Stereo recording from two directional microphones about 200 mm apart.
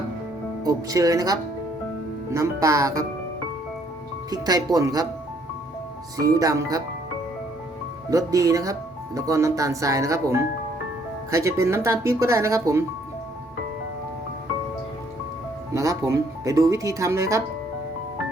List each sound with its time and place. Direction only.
0.6 s speech: 20° right (ahead or behind)
4.3 s speech: 20° right (ahead or behind)
6.3 s speech: 15° right (ahead or behind)
8.1 s speech: 15° right (ahead or behind)
15.7 s speech: 15° right (ahead or behind)